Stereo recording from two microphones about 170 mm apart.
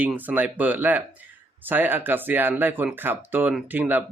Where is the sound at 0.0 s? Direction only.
10° right (ahead or behind).